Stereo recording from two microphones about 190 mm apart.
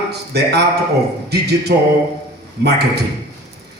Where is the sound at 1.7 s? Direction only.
60° right (ahead or behind).